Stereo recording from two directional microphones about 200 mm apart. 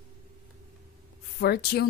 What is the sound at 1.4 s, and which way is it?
Speech, 50° left (ahead or behind).